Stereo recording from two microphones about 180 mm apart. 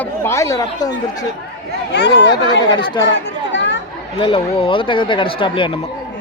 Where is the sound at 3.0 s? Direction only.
90° left.